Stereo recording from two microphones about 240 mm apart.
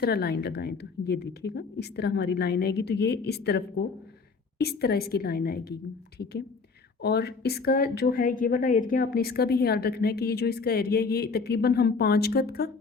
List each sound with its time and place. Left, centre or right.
0.0 s a woman's voice: left
7.0 s a woman's voice: left